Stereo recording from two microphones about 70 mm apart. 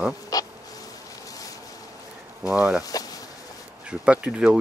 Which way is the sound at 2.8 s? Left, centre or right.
Left.